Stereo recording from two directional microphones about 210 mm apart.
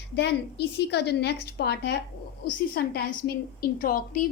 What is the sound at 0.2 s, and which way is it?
A woman's voice, 50° left (ahead or behind).